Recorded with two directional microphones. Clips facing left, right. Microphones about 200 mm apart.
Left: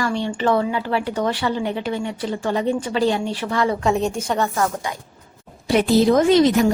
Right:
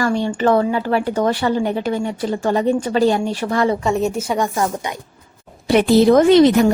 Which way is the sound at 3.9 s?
5° right (ahead or behind).